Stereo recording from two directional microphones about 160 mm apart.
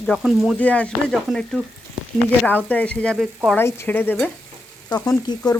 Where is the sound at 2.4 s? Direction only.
10° left (ahead or behind).